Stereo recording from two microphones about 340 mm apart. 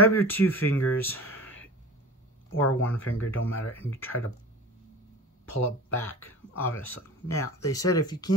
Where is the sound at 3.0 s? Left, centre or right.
Left.